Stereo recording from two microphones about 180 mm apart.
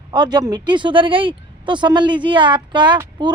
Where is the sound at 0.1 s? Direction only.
25° right (ahead or behind).